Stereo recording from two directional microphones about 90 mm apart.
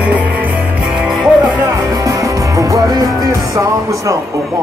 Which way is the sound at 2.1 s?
40° right (ahead or behind).